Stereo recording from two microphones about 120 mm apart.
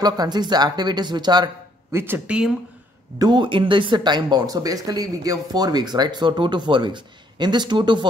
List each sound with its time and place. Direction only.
0.0 s speech: 35° right (ahead or behind)
1.9 s speech: 20° right (ahead or behind)
3.2 s speech: 40° right (ahead or behind)